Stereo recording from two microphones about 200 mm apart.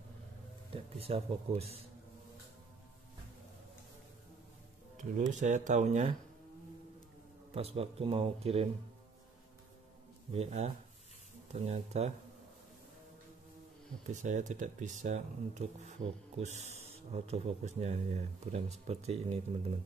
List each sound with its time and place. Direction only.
0.7 s speech: 30° right (ahead or behind)
4.9 s speech: 40° right (ahead or behind)
7.5 s speech: 30° right (ahead or behind)
10.3 s speech: 30° right (ahead or behind)
14.0 s speech: 35° right (ahead or behind)